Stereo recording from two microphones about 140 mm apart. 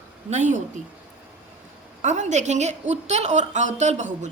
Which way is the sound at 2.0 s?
60° right (ahead or behind).